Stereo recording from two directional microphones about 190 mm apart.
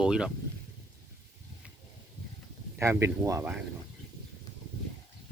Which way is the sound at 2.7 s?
15° right (ahead or behind).